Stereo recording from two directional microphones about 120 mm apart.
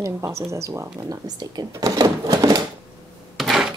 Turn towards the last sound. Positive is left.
turn(degrees=0)  # may be behind; listen again after turning